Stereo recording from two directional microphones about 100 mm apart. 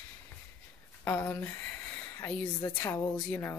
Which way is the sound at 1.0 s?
20° left (ahead or behind).